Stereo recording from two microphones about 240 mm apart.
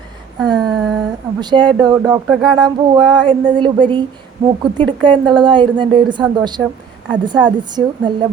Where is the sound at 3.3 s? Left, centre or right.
Right.